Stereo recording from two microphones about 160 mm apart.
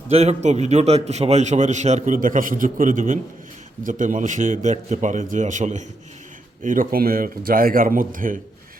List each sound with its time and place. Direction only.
0.1 s a man's voice: 40° right (ahead or behind); by 8.4 s 60° right (ahead or behind)